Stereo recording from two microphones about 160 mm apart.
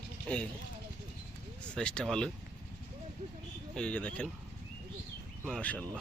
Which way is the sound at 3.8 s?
10° left (ahead or behind).